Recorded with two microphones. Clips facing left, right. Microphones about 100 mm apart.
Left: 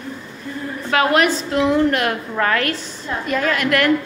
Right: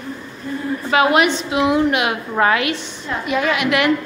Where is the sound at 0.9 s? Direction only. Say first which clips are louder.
Right 1 dB; 5° right (ahead or behind).